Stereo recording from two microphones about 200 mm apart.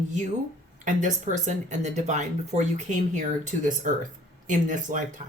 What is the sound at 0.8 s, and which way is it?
Speech, 40° right (ahead or behind).